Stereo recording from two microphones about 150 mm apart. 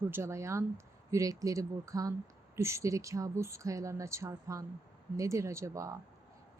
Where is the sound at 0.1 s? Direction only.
20° right (ahead or behind).